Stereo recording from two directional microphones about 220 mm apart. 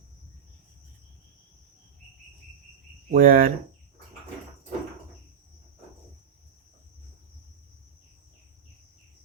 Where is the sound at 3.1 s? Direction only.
40° right (ahead or behind).